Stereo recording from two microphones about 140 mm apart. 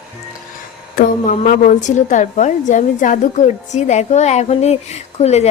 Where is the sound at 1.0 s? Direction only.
85° left.